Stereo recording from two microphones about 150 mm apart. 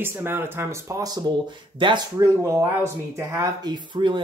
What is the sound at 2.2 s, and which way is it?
Speech, 20° right (ahead or behind).